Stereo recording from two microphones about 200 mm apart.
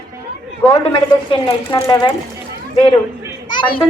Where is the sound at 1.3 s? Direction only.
25° left (ahead or behind).